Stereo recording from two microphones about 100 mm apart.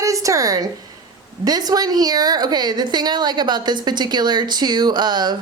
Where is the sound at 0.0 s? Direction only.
35° right (ahead or behind).